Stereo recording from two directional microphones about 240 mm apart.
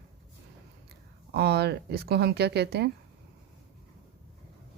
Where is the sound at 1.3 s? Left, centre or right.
Right.